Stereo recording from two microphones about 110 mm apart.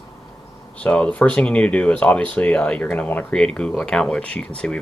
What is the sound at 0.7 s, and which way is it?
Speech, 10° left (ahead or behind).